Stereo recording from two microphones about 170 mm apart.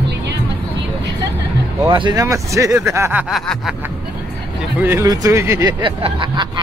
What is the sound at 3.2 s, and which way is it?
Snicker, centre (ahead or behind).